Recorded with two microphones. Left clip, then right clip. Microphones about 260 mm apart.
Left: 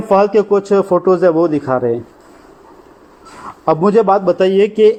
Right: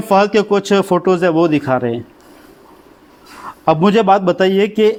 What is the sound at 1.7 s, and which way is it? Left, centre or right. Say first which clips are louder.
Speech: left 1 dB; right.